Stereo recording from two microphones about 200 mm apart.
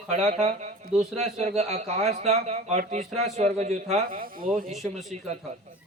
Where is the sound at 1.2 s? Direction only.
35° right (ahead or behind).